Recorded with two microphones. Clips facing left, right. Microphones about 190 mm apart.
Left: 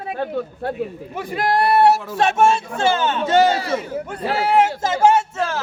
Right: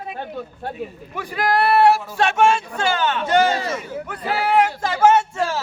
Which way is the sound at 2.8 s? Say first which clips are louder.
Left 4 dB; 25° left (ahead or behind).